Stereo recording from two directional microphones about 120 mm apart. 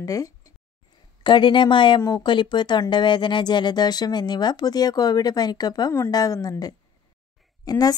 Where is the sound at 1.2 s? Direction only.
40° left (ahead or behind).